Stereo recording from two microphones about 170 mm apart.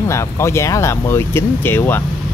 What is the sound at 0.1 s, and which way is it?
Speech, 15° left (ahead or behind).